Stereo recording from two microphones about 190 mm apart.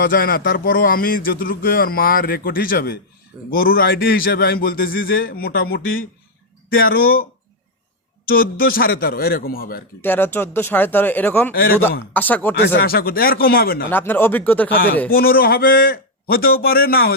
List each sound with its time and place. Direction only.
0.0 s a man's voice: 50° left (ahead or behind)
8.3 s a man's voice: 50° left (ahead or behind)
10.0 s speech: 10° left (ahead or behind)
12.5 s a man's voice: 65° left (ahead or behind); by 13.8 s 50° left (ahead or behind)
13.9 s speech: 10° left (ahead or behind)
15.1 s a man's voice: 50° left (ahead or behind)